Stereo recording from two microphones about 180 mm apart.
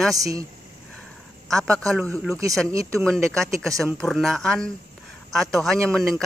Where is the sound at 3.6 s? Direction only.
Centre (ahead or behind).